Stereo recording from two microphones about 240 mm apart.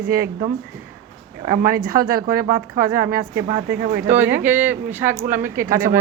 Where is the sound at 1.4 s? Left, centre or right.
Right.